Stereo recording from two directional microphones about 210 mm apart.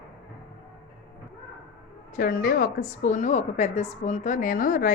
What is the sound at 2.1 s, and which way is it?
A woman's voice, 40° left (ahead or behind).